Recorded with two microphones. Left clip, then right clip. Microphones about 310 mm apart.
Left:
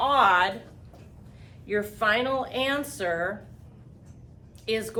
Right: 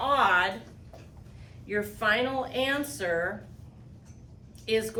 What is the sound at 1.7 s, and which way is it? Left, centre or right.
A woman's voice, centre.